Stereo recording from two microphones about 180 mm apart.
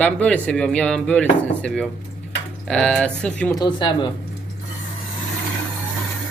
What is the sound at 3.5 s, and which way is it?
Speech, 25° left (ahead or behind).